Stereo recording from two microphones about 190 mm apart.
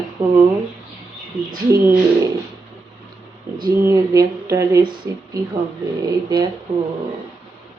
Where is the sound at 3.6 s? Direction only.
15° right (ahead or behind).